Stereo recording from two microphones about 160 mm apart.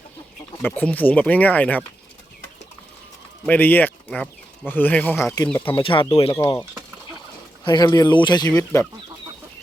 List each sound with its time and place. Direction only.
0.6 s speech: 10° left (ahead or behind)
3.4 s speech: 10° left (ahead or behind)
5.7 s speech: 30° left (ahead or behind)